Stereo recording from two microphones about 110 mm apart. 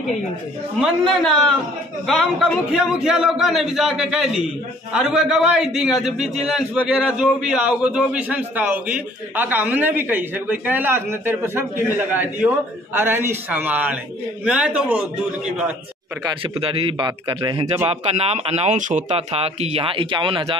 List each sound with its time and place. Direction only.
1.0 s a man's voice: 5° left (ahead or behind)
2.7 s a man's voice: 5° right (ahead or behind)
16.5 s speech: 60° right (ahead or behind)
17.0 s speech: 45° right (ahead or behind)
17.8 s speech: 70° right (ahead or behind); by 20.5 s 50° right (ahead or behind)